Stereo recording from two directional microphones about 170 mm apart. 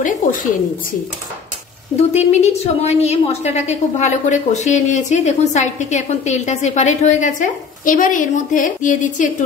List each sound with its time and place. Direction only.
0.0 s a woman's voice: 50° left (ahead or behind)
2.0 s a woman's voice: 40° left (ahead or behind)